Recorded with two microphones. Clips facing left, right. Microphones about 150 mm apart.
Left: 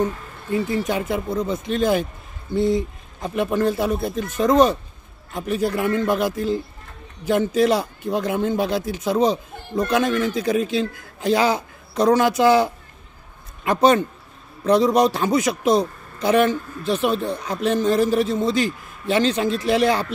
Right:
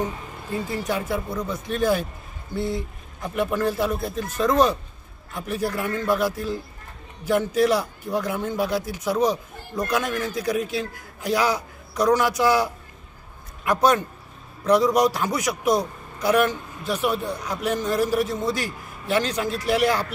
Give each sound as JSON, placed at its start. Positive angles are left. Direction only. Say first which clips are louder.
{"t": 0.8, "sound": "a man's voice", "louder": "left 3 dB", "side_deg": 20}